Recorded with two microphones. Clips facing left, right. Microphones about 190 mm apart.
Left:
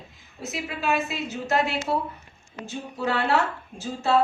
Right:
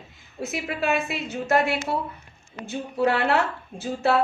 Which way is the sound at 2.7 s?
60° right (ahead or behind).